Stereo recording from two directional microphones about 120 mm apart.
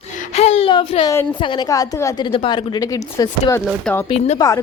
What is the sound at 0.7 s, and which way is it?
Speech, 45° left (ahead or behind).